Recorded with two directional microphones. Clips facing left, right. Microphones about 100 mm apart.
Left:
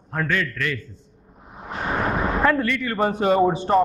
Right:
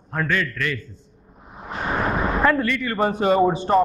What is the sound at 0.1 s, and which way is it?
Speech, 20° right (ahead or behind).